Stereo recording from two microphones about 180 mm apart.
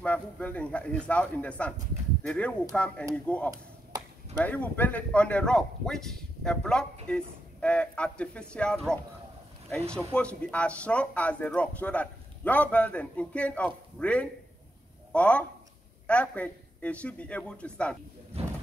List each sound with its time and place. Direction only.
0.0 s speech: 10° left (ahead or behind)
9.8 s speech: 15° right (ahead or behind)
10.1 s speech: 5° left (ahead or behind)
18.4 s a sound: 35° right (ahead or behind)